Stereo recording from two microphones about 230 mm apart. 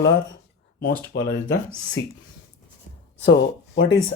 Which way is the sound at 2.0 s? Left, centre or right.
Left.